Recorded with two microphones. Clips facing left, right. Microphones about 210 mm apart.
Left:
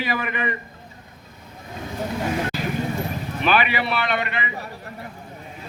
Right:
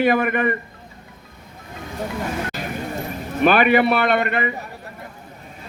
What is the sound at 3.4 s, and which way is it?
A man's voice, 50° right (ahead or behind).